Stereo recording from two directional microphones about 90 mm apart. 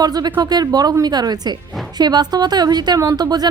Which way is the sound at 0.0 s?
45° right (ahead or behind).